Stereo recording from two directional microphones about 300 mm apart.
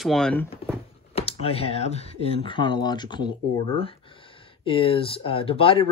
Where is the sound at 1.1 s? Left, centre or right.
Centre.